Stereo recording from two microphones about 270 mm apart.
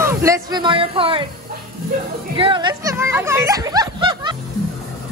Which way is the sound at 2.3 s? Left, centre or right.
Centre.